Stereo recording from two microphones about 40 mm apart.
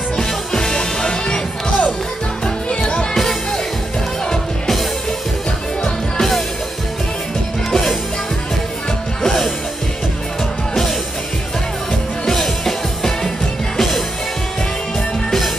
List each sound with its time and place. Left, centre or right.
0.1 s music: centre
3.2 s music: centre
6.1 s music: centre
7.7 s music: centre
9.2 s music: centre
12.3 s music: centre